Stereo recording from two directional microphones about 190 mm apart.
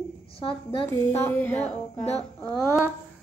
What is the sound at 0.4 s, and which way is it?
Speech, 30° left (ahead or behind).